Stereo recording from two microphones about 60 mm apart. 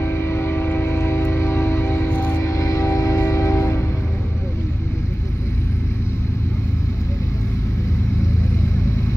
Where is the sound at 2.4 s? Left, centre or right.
Left.